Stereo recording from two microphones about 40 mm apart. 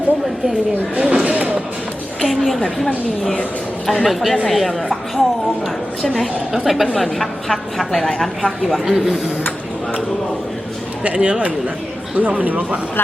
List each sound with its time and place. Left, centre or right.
0.9 s speech: right
1.2 s a sound: right
2.2 s a sound: centre
2.6 s a woman's voice: centre
6.5 s a woman's voice: centre
11.0 s speech: right
12.1 s speech: right